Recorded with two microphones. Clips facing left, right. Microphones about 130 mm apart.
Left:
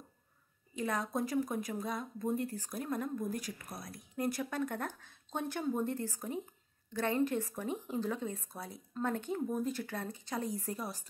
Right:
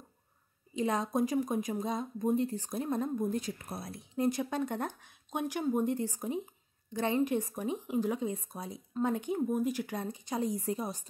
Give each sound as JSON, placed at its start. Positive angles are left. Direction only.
{"t": 0.7, "sound": "speech", "side_deg": -20}